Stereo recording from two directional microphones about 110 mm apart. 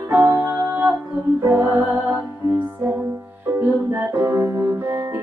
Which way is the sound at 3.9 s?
20° right (ahead or behind).